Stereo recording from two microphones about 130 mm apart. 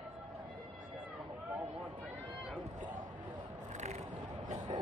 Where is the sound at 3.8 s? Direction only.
60° right (ahead or behind).